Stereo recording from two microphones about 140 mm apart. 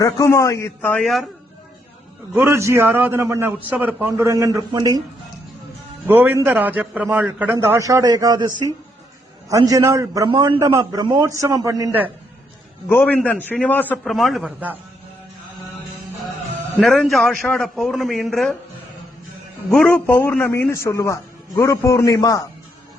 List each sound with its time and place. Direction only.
0.0 s a man's voice: 25° left (ahead or behind)
1.0 s a man's voice: centre (ahead or behind)
2.3 s a man's voice: 20° right (ahead or behind)
6.1 s a man's voice: 15° right (ahead or behind)
10.2 s a man's voice: 35° right (ahead or behind)
12.9 s a man's voice: 10° left (ahead or behind)
14.0 s a man's voice: centre (ahead or behind)
16.8 s a man's voice: centre (ahead or behind)
19.7 s a man's voice: 10° left (ahead or behind); by 22.4 s 25° left (ahead or behind)